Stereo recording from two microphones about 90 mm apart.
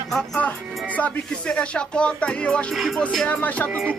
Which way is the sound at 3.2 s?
15° left (ahead or behind).